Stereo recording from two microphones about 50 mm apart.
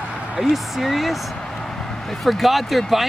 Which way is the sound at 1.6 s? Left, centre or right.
Centre.